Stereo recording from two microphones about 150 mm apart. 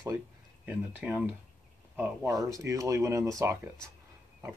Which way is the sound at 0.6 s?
10° right (ahead or behind).